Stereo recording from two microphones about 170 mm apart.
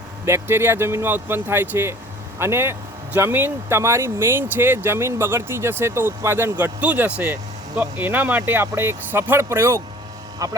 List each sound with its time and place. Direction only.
0.3 s speech: 15° right (ahead or behind)